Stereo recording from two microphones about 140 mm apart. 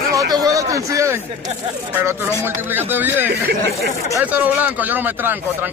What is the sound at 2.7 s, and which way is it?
Speech, 15° right (ahead or behind).